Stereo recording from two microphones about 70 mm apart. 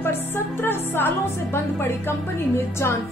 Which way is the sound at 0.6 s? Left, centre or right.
Left.